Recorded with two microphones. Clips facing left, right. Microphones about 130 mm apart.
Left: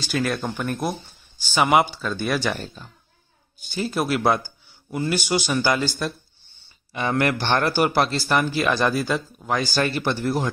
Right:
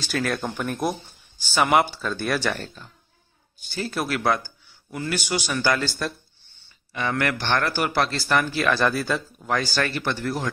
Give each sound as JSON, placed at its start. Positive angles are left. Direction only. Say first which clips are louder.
{"t": 0.0, "sound": "speech", "louder": "left 1 dB", "side_deg": 5}
{"t": 1.5, "sound": "speech", "louder": "left 1 dB", "side_deg": 10}
{"t": 1.9, "sound": "speech", "louder": "left 1 dB", "side_deg": 0}
{"t": 2.1, "sound": "speech", "louder": "left 1 dB", "side_deg": 10}